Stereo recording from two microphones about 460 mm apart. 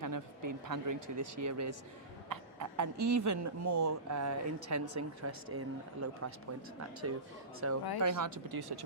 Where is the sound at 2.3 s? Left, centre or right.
Right.